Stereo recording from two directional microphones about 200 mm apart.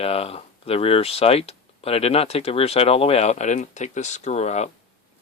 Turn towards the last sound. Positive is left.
turn(degrees=35)  # may be behind; listen again after turning